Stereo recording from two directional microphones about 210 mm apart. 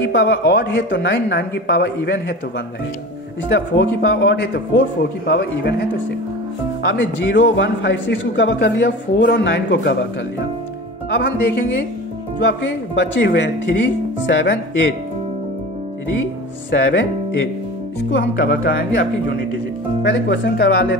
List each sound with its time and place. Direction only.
0.0 s speech: 50° left (ahead or behind)
3.4 s speech: 50° left (ahead or behind)
12.4 s speech: 55° left (ahead or behind)
16.7 s speech: 60° left (ahead or behind)
18.1 s speech: 45° left (ahead or behind)